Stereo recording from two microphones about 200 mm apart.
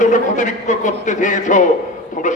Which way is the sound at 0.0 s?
40° left (ahead or behind).